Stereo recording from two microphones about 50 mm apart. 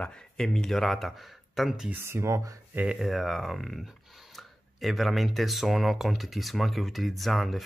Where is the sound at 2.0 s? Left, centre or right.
Right.